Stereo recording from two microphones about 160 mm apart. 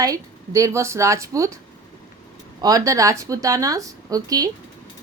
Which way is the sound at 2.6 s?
20° right (ahead or behind).